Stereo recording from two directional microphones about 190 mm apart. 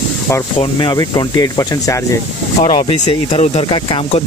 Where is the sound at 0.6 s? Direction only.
25° left (ahead or behind).